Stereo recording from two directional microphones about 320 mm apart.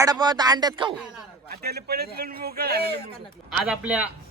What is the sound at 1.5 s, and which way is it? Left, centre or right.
Speech, right.